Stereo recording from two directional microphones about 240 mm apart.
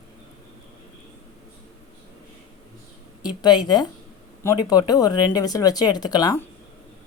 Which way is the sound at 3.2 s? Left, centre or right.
Centre.